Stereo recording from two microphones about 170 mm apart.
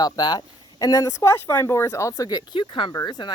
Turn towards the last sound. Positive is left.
turn(degrees=25)  # may be behind; listen again after turning